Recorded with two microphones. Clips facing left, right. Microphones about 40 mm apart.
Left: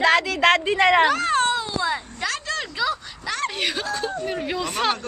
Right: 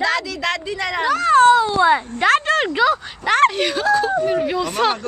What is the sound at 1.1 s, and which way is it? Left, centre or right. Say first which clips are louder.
Speech: right 8 dB; centre.